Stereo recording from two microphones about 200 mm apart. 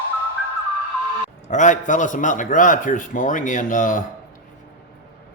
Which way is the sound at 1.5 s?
40° left (ahead or behind).